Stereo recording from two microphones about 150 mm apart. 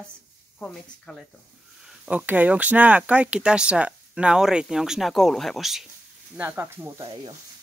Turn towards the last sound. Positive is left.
turn(degrees=-15)  # may be behind; listen again after turning